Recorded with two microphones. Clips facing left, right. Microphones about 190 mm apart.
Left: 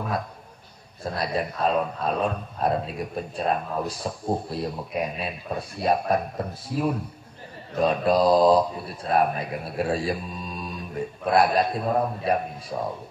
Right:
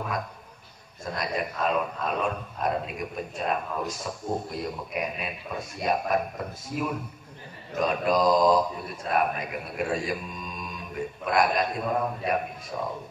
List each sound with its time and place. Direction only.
1.0 s a man's voice: 35° left (ahead or behind)